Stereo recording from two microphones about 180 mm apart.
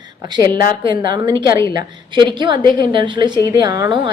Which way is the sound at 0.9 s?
25° right (ahead or behind).